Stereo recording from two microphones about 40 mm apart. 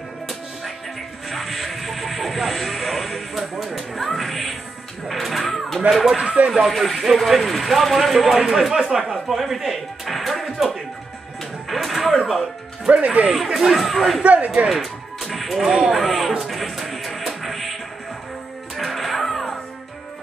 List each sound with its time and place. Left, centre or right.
1.3 s a sound: centre
4.2 s music: centre
5.8 s speech: centre
6.1 s speech: right
6.7 s speech: centre
11.7 s music: centre
12.8 s speech: right
13.5 s speech: centre
13.7 s speech: centre
14.2 s speech: right
14.7 s music: centre
15.7 s speech: centre
16.0 s music: centre
18.8 s music: centre